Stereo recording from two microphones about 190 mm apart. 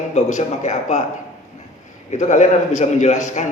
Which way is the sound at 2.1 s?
40° left (ahead or behind).